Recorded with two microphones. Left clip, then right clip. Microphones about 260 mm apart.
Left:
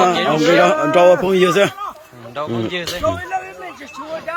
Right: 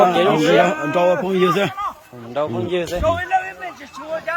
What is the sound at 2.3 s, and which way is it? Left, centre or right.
Speech, right.